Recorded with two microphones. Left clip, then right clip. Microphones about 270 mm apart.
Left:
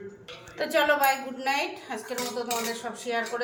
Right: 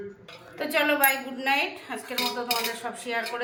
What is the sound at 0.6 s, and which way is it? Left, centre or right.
A woman's voice, centre.